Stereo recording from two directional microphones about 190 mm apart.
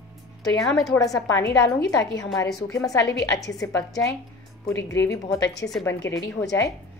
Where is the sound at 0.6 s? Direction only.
Centre (ahead or behind).